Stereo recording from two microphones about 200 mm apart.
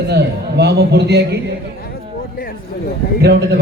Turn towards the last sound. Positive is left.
turn(degrees=-55)  # may be behind; listen again after turning